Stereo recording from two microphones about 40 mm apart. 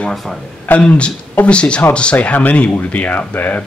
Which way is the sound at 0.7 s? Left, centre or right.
Left.